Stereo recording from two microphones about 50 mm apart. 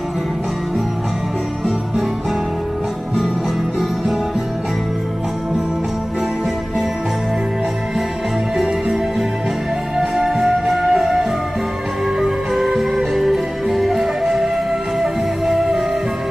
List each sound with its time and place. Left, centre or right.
9.9 s music: centre